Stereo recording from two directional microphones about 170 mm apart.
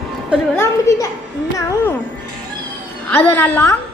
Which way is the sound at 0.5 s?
15° left (ahead or behind).